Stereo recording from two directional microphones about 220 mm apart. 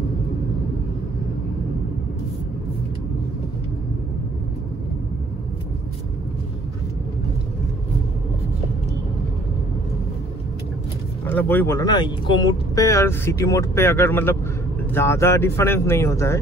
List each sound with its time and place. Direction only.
11.2 s speech: 10° left (ahead or behind)